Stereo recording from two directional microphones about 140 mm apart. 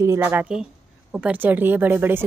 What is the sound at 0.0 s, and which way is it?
A woman's voice, 15° right (ahead or behind).